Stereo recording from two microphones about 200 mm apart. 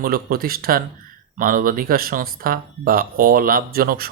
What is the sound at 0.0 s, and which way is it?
Speech, 50° right (ahead or behind).